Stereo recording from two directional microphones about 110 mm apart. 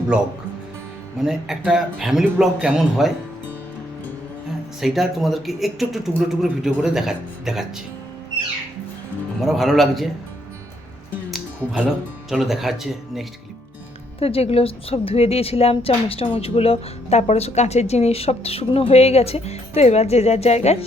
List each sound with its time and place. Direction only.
1.2 s speech: 5° right (ahead or behind)
4.8 s speech: centre (ahead or behind)
9.4 s speech: centre (ahead or behind)
11.3 s music: centre (ahead or behind)
12.3 s speech: centre (ahead or behind)
14.2 s a woman's voice: 65° left (ahead or behind)